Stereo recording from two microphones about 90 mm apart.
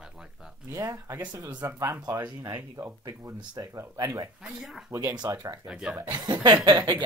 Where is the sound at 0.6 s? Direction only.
30° right (ahead or behind).